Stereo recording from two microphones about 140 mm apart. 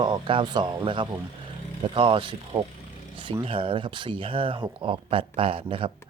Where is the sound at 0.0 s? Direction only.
35° right (ahead or behind).